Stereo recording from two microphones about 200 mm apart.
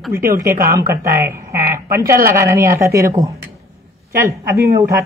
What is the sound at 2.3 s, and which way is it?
Speech, 15° right (ahead or behind).